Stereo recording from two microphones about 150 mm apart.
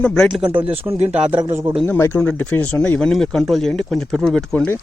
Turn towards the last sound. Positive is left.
turn(degrees=10)  # may be behind; listen again after turning